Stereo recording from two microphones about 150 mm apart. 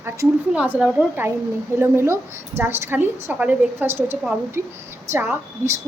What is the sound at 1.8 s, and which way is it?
A woman's voice, 15° right (ahead or behind).